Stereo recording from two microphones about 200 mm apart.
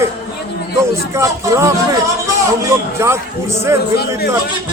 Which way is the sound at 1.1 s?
15° right (ahead or behind).